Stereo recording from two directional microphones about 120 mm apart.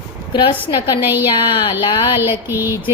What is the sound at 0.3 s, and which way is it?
Speech, 40° left (ahead or behind).